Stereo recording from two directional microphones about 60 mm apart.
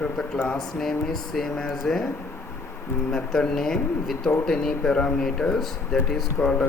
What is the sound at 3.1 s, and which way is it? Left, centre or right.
Speech, centre.